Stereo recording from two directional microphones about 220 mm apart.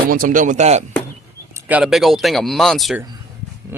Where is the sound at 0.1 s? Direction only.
40° right (ahead or behind).